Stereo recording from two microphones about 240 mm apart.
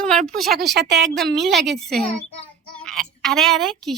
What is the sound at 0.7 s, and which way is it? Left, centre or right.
Speech, right.